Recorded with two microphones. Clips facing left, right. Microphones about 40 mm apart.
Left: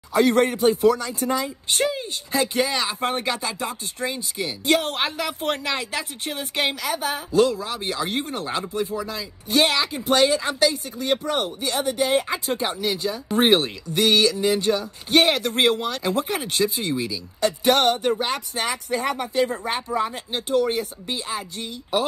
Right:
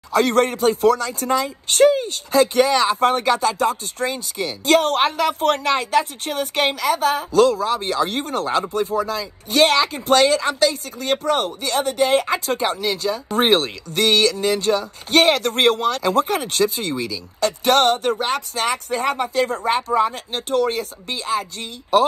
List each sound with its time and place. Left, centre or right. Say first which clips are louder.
0.1 s speech: right 1 dB; right
1.9 s speech: right 9 dB; right
4.6 s speech: right 6 dB; right
10.7 s speech: right 1 dB; right
19.7 s speech: right 6 dB; right